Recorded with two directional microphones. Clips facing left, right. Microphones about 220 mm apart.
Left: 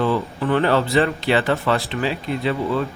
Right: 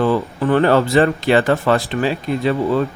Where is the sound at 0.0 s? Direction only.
45° right (ahead or behind).